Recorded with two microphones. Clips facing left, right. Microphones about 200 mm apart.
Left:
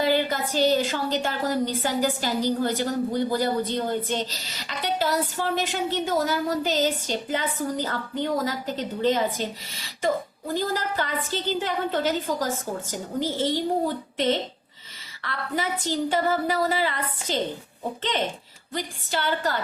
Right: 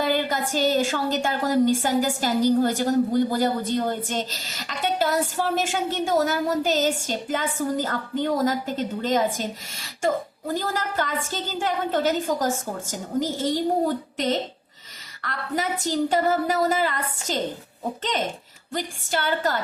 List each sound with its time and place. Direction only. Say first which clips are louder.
0.0 s a woman's voice: left 1 dB; 45° right (ahead or behind)
15.2 s a woman's voice: right 1 dB; 45° right (ahead or behind)
18.7 s a woman's voice: right 2 dB; 50° right (ahead or behind)